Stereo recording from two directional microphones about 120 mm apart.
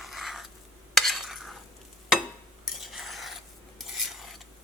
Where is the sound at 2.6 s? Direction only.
5° right (ahead or behind).